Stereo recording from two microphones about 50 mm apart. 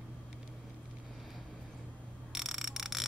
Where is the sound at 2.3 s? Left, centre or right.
Centre.